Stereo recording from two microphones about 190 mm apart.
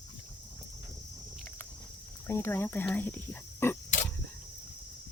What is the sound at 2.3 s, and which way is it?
Speech, 10° left (ahead or behind).